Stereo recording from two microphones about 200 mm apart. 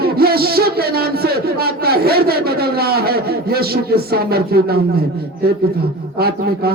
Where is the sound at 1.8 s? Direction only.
50° right (ahead or behind).